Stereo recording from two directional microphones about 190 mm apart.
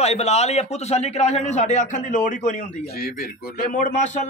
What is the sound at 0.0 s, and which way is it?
Speech, 35° left (ahead or behind).